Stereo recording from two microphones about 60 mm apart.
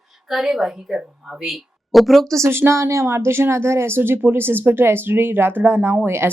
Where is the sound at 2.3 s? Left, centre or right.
Right.